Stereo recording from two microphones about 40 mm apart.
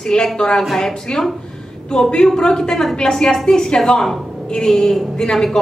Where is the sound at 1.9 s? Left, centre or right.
Centre.